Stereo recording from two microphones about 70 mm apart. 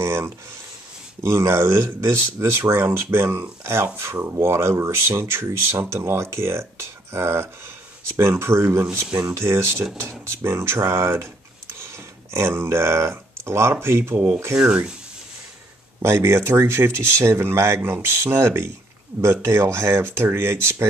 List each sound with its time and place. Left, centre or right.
0.0 s a sound: right
1.2 s speech: right
14.1 s speech: centre
16.0 s speech: right